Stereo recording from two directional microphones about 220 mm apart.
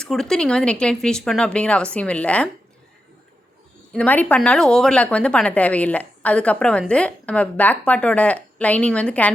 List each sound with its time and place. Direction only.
0.0 s speech: centre (ahead or behind)
3.9 s speech: 10° left (ahead or behind)